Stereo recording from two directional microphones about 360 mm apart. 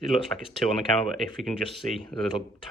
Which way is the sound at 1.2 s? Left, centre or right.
Centre.